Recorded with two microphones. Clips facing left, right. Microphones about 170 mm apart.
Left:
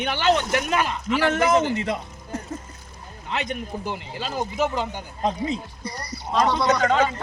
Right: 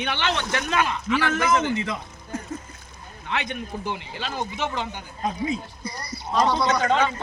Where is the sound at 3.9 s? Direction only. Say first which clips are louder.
Left 1 dB; 45° left (ahead or behind).